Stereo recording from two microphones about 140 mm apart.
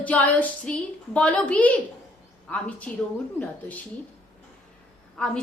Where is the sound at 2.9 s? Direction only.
5° left (ahead or behind).